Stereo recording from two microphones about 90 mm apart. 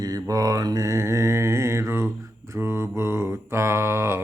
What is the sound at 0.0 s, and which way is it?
Mantra, 45° right (ahead or behind).